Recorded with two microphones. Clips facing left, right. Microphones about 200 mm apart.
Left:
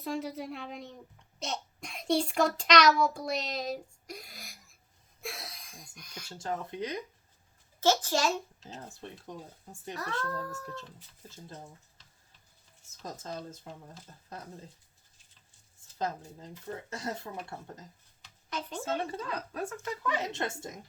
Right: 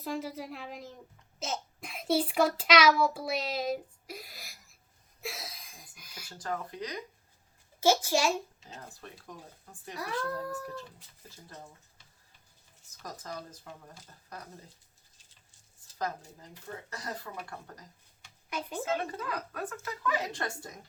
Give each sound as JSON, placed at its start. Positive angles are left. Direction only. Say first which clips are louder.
{"t": 0.0, "sound": "a woman's voice", "louder": "left 1 dB", "side_deg": 0}
{"t": 5.2, "sound": "a sound", "louder": "right 1 dB", "side_deg": 0}
{"t": 6.2, "sound": "speech", "louder": "left 1 dB", "side_deg": 25}
{"t": 7.8, "sound": "speech", "louder": "right 1 dB", "side_deg": -10}
{"t": 8.9, "sound": "speech", "louder": "left 4 dB", "side_deg": 25}
{"t": 9.9, "sound": "speech", "louder": "right 1 dB", "side_deg": -10}
{"t": 11.3, "sound": "speech", "louder": "left 3 dB", "side_deg": 20}
{"t": 13.0, "sound": "speech", "louder": "left 2 dB", "side_deg": 25}
{"t": 16.0, "sound": "speech", "louder": "left 1 dB", "side_deg": 25}
{"t": 18.5, "sound": "speech", "louder": "right 1 dB", "side_deg": -10}
{"t": 18.9, "sound": "speech", "louder": "even", "side_deg": 25}